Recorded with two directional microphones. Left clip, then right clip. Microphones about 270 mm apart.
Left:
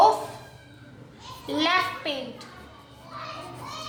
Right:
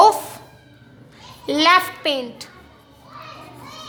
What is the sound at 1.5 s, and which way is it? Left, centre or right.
A woman's voice, right.